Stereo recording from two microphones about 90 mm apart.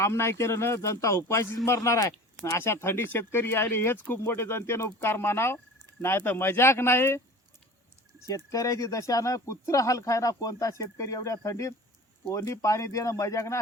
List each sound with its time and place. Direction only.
0.0 s speech: 30° left (ahead or behind)
8.4 s speech: 40° left (ahead or behind)